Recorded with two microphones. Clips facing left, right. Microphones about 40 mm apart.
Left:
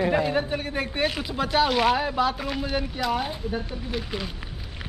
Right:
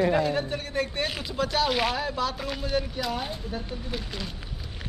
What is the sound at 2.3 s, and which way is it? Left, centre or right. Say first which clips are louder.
Speech: left 1 dB; centre.